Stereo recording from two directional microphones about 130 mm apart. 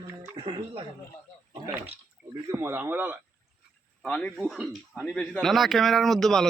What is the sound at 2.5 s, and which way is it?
Speech, 20° right (ahead or behind).